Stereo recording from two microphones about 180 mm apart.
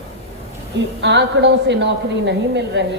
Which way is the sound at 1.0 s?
75° right (ahead or behind).